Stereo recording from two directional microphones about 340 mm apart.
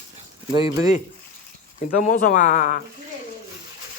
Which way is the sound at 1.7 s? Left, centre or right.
Left.